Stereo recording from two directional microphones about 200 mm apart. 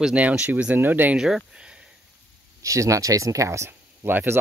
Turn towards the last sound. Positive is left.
turn(degrees=-10)  # may be behind; listen again after turning